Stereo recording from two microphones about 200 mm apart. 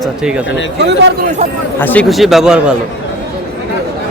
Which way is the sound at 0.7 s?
60° right (ahead or behind).